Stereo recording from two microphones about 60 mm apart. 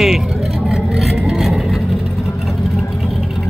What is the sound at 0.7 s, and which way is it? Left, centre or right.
Vehicle, centre.